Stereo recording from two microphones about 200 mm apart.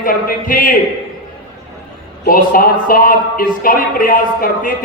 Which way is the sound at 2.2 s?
45° left (ahead or behind).